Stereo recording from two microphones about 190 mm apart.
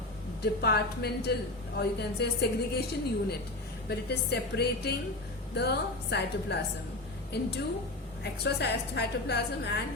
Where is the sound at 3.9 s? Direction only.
60° left (ahead or behind).